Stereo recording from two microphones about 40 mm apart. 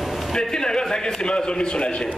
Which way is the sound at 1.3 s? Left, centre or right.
Left.